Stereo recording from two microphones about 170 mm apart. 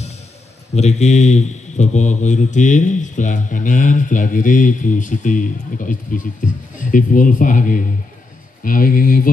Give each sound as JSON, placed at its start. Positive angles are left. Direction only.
{"t": 0.7, "sound": "speech", "side_deg": 40}